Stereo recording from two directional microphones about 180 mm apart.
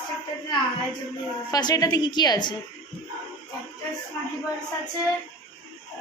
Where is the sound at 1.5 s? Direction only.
20° left (ahead or behind).